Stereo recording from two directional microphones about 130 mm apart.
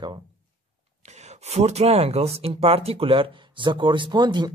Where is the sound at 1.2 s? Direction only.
55° right (ahead or behind).